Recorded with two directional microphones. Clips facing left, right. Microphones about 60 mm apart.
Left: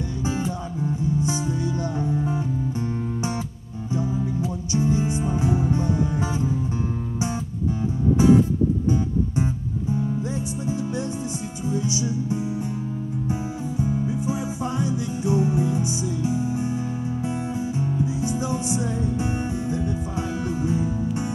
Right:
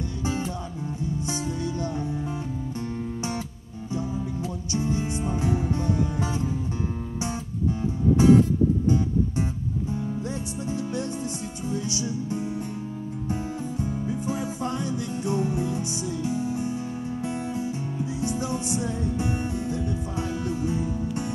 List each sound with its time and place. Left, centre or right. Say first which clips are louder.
0.2 s music: left 2 dB; centre
3.9 s music: left 4 dB; centre
8.2 s music: even; centre
11.7 s music: left 4 dB; centre
17.7 s music: left 5 dB; centre